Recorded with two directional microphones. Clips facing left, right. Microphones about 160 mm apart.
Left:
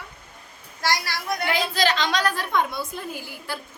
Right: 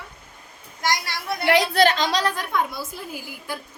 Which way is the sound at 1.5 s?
70° right (ahead or behind).